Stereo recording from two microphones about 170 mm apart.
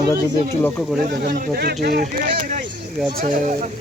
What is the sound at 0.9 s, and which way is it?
Speech, 60° right (ahead or behind).